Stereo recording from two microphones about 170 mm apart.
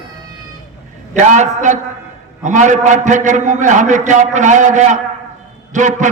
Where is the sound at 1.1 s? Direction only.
45° right (ahead or behind).